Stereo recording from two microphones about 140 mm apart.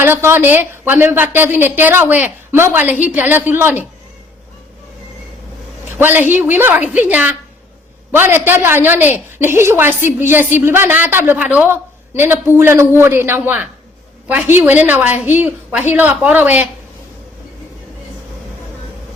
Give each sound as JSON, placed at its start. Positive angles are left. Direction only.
{"t": 0.0, "sound": "a woman's voice", "side_deg": -15}
{"t": 6.0, "sound": "a woman's voice", "side_deg": -15}